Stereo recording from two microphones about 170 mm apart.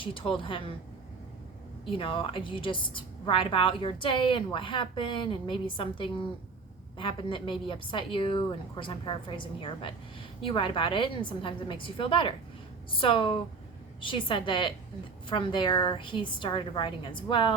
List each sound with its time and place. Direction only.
0.0 s speech: 30° left (ahead or behind)
1.8 s a woman's voice: 30° left (ahead or behind)